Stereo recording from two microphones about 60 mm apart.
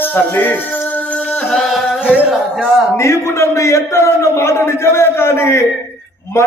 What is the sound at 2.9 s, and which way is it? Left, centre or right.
A man's voice, left.